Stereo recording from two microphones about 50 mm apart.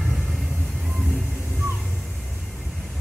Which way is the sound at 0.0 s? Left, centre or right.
Centre.